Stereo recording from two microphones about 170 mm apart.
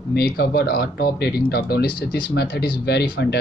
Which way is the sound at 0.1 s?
65° left (ahead or behind).